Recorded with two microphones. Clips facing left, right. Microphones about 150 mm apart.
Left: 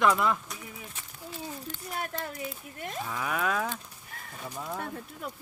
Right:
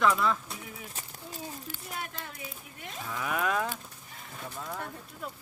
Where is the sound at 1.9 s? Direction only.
45° left (ahead or behind).